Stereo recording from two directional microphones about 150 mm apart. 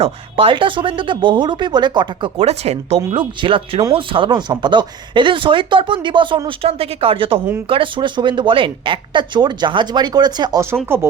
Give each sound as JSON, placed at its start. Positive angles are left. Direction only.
{"t": 0.0, "sound": "speech", "side_deg": -35}